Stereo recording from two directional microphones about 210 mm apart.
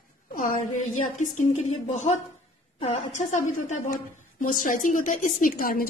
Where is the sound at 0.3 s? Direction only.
40° left (ahead or behind).